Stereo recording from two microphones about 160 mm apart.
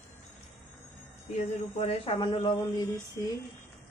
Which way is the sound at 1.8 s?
35° left (ahead or behind).